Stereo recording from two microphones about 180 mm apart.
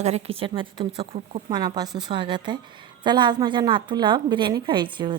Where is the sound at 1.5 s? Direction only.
20° right (ahead or behind).